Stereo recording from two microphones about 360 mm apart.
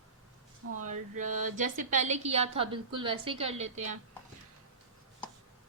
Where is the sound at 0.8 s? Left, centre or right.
Right.